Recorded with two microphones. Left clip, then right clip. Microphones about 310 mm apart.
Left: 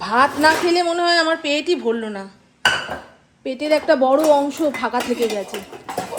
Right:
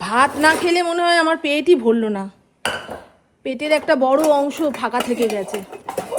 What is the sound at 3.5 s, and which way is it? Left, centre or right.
Speech, right.